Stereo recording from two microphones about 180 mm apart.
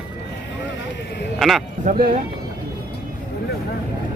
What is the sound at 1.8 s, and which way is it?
Speech, 45° right (ahead or behind).